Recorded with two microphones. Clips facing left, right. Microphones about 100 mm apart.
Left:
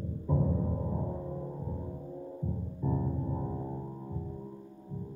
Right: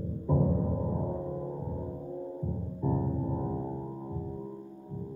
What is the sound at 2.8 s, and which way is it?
Keyboard, 15° right (ahead or behind).